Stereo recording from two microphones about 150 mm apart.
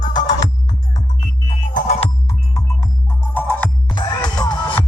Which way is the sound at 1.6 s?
65° left (ahead or behind).